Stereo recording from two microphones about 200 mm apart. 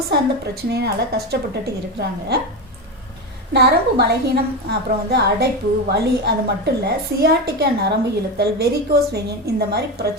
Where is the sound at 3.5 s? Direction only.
55° right (ahead or behind).